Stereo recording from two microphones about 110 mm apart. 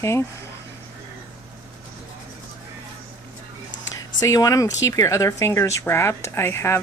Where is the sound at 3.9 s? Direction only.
30° left (ahead or behind).